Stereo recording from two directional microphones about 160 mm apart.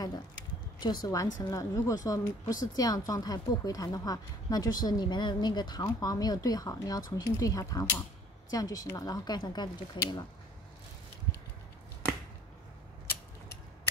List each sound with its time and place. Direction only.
0.7 s a woman's voice: 25° left (ahead or behind)